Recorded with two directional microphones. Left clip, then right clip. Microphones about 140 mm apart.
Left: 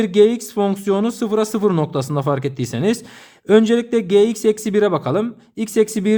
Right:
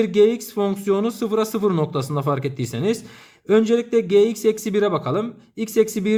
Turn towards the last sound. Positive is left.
turn(degrees=35)  # may be behind; listen again after turning